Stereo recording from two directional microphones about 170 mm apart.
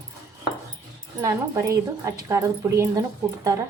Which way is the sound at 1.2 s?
20° right (ahead or behind).